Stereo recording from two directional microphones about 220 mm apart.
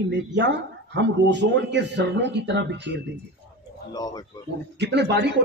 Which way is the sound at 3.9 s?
15° left (ahead or behind).